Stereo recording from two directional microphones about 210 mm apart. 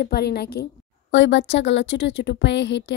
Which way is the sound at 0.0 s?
50° left (ahead or behind).